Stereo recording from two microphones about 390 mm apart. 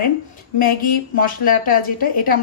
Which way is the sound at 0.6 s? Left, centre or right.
Left.